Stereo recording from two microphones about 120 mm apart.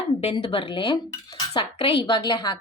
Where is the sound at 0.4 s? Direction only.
45° left (ahead or behind).